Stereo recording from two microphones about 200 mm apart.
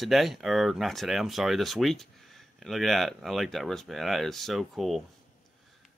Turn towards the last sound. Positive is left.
turn(degrees=0)  # may be behind; listen again after turning